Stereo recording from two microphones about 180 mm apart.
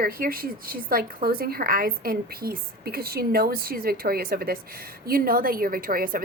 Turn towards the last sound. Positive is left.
turn(degrees=-50)  # may be behind; listen again after turning